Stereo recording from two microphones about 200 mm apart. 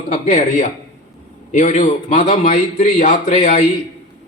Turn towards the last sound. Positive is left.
turn(degrees=30)  # may be behind; listen again after turning